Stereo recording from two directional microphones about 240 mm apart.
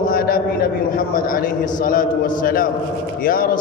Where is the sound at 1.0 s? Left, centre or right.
Left.